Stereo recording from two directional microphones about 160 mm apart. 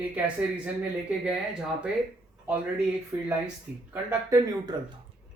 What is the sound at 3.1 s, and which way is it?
Speech, 10° right (ahead or behind).